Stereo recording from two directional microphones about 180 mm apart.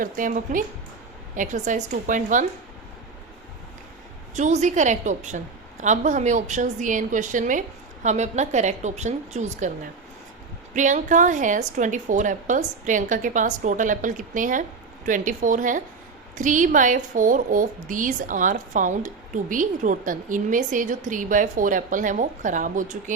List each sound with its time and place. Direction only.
0.0 s a woman's voice: 45° right (ahead or behind)
4.4 s a woman's voice: 40° right (ahead or behind)
10.8 s a woman's voice: 45° right (ahead or behind)